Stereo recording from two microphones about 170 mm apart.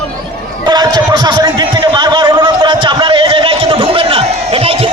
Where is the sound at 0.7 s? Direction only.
25° right (ahead or behind).